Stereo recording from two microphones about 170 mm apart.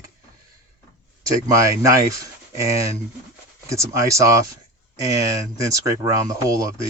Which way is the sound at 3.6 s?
15° right (ahead or behind).